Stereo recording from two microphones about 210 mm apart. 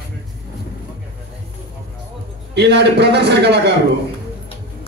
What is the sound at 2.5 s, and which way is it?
A man's voice, 50° right (ahead or behind).